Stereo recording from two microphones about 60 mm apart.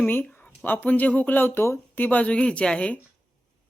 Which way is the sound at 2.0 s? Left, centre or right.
Left.